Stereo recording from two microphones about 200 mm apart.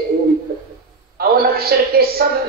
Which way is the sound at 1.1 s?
50° right (ahead or behind).